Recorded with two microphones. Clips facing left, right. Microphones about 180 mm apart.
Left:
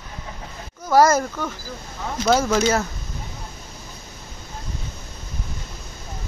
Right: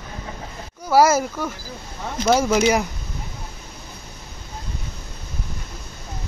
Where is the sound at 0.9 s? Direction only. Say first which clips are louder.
Even; 10° right (ahead or behind).